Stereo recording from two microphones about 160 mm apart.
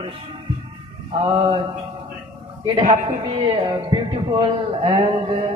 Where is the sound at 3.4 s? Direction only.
30° right (ahead or behind).